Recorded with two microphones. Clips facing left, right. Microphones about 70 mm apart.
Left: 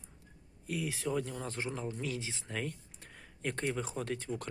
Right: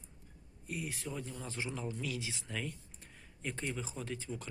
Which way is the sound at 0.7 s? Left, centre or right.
Left.